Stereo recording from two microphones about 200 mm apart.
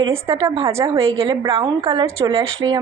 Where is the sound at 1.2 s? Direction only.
25° right (ahead or behind).